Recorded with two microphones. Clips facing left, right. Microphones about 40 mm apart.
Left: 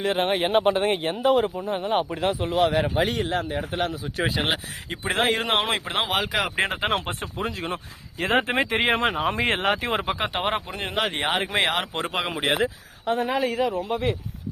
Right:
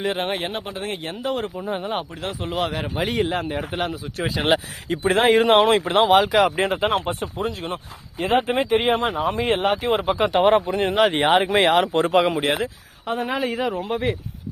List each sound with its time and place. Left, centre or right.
0.0 s speech: centre
0.6 s speech: left
1.0 s speech: centre
2.0 s speech: left
2.4 s speech: centre
6.7 s speech: left
8.2 s speech: left
10.2 s speech: centre